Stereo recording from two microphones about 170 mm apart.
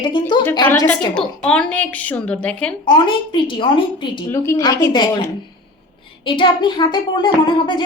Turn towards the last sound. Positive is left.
turn(degrees=30)  # may be behind; listen again after turning